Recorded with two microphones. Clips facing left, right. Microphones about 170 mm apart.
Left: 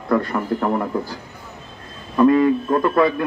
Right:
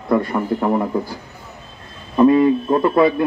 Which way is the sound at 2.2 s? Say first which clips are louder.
Right 2 dB; 20° right (ahead or behind).